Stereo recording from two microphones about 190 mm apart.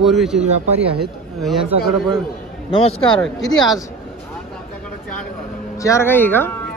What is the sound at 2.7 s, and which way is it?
Speech, 25° left (ahead or behind).